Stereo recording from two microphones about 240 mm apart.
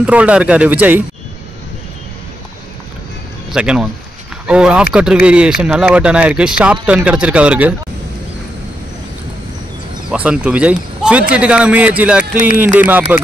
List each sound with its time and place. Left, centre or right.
0.0 s a man's voice: centre
3.5 s a man's voice: centre
10.1 s a man's voice: centre